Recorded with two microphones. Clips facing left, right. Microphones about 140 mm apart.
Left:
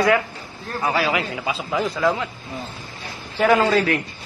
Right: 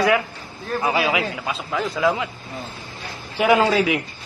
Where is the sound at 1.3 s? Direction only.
Centre (ahead or behind).